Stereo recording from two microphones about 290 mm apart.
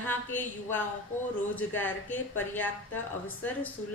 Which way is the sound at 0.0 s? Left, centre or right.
Centre.